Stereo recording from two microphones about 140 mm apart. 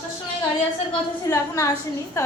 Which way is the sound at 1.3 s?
20° left (ahead or behind).